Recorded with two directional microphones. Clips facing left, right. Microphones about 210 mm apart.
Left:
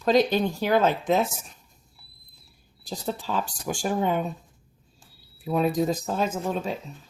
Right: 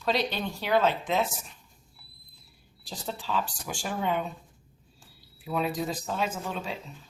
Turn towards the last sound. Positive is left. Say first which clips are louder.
# left 6 dB
turn(degrees=40)  # may be behind; listen again after turning